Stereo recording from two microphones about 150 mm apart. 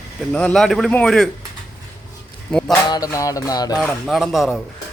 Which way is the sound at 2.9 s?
25° left (ahead or behind).